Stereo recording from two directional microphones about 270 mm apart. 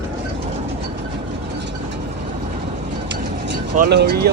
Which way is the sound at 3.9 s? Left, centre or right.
Right.